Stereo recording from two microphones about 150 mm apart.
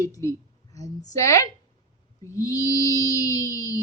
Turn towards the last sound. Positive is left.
turn(degrees=20)  # may be behind; listen again after turning